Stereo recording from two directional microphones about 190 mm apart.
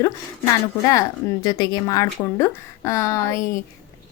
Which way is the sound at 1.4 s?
20° left (ahead or behind).